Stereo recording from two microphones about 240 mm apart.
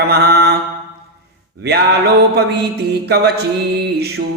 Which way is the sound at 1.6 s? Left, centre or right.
Right.